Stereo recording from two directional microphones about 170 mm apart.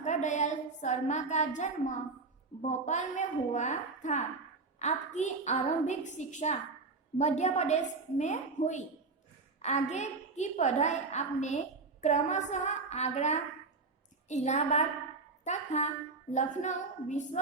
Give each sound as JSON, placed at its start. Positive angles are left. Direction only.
{"t": 0.0, "sound": "a woman's voice", "side_deg": 45}